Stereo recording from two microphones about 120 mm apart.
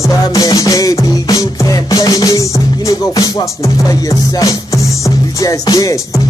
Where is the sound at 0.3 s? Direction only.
30° left (ahead or behind).